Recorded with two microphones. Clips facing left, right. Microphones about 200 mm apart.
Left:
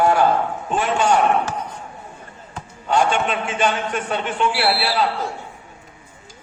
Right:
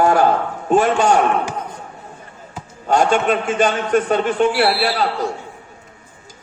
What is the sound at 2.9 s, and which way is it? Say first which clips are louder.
A man's voice: right 4 dB; 40° right (ahead or behind).